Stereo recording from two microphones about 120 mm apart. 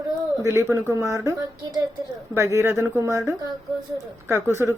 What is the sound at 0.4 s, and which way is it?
Speech, 25° right (ahead or behind).